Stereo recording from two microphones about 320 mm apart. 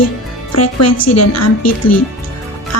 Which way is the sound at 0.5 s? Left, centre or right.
Left.